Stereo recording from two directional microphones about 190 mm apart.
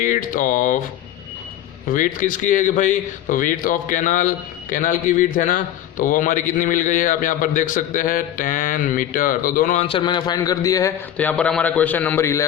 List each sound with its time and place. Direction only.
0.0 s a man's voice: 45° left (ahead or behind)
1.9 s a man's voice: 45° left (ahead or behind)
9.8 s a man's voice: 25° left (ahead or behind)
11.2 s a man's voice: 5° left (ahead or behind)